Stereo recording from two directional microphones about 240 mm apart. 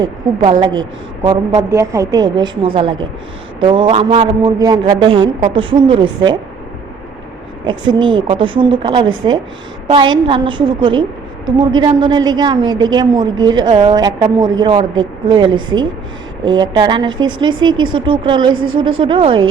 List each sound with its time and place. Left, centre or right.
0.0 s a woman's voice: right
7.6 s a woman's voice: centre